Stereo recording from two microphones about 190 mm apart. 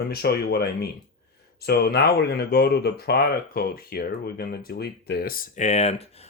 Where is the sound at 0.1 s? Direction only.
55° left (ahead or behind).